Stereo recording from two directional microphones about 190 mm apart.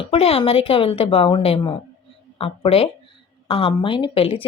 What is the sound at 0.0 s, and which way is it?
Speech, 30° left (ahead or behind).